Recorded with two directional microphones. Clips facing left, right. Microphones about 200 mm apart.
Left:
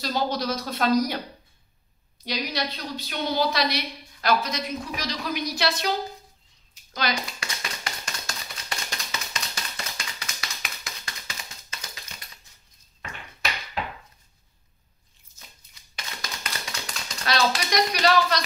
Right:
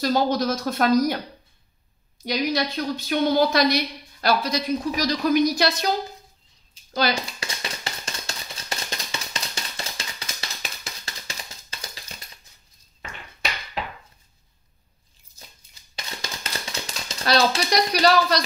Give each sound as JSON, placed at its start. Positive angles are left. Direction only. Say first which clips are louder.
{"t": 0.0, "sound": "a woman's voice", "louder": "right 5 dB", "side_deg": -50}
{"t": 2.2, "sound": "a woman's voice", "louder": "right 6 dB", "side_deg": -50}
{"t": 4.2, "sound": "a woman's voice", "louder": "right 2 dB", "side_deg": -35}
{"t": 6.7, "sound": "a sound", "louder": "right 5 dB", "side_deg": -30}
{"t": 16.2, "sound": "typewriter", "louder": "right 2 dB", "side_deg": -25}